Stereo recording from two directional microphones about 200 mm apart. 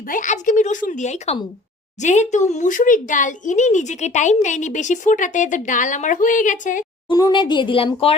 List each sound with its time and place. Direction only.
0.1 s speech: 40° left (ahead or behind)
7.1 s speech: 20° left (ahead or behind)